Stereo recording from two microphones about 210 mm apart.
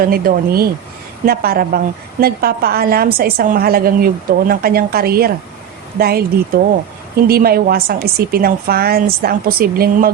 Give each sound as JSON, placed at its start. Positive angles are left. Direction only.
{"t": 0.0, "sound": "a woman's voice", "side_deg": -45}